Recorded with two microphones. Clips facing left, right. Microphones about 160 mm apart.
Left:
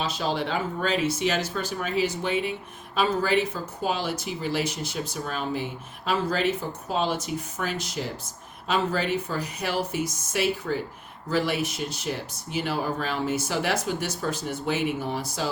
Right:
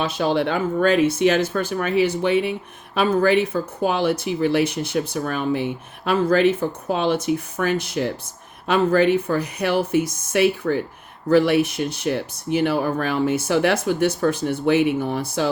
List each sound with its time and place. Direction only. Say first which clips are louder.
0.0 s speech: right 7 dB; 60° right (ahead or behind)